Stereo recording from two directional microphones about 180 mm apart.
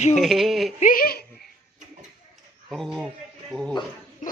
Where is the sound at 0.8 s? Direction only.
50° left (ahead or behind).